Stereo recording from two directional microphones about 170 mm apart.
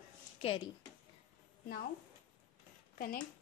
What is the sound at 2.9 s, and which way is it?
Speech, 60° left (ahead or behind).